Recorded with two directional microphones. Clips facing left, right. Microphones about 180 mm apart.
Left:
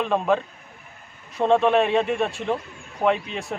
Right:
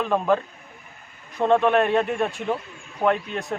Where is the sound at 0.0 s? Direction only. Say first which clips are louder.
Even; centre (ahead or behind).